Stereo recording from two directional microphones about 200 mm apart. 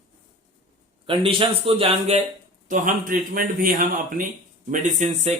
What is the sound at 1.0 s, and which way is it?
A man's voice, 25° right (ahead or behind).